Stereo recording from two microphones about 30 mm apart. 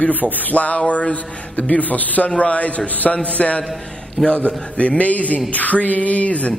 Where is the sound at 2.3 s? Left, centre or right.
Left.